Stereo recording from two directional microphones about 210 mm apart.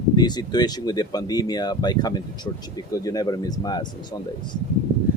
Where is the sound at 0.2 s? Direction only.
20° left (ahead or behind).